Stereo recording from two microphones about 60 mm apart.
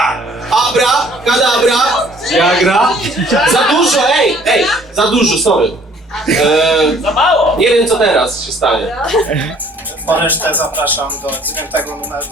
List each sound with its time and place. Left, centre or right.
0.0 s music: centre
6.1 s a man's voice: centre
10.1 s speech: right